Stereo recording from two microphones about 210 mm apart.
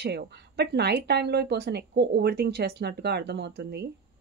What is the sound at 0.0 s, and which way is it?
Speech, 50° right (ahead or behind).